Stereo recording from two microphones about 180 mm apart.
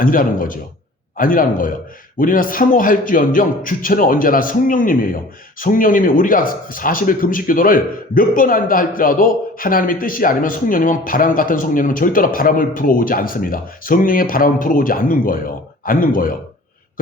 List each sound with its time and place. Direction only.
0.0 s speech: 50° left (ahead or behind)